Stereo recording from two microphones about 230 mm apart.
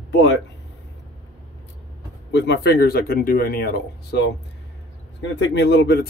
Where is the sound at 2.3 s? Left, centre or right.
Left.